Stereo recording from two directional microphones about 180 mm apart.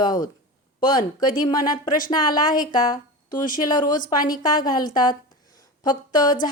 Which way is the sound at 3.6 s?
25° left (ahead or behind).